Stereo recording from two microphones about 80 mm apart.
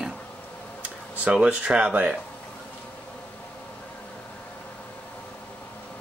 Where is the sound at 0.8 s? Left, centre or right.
Centre.